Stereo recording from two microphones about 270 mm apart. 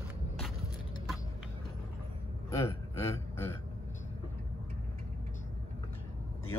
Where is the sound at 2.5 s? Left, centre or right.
Centre.